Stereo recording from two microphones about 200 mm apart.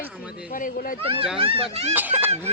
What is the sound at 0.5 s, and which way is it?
Speech, 45° left (ahead or behind).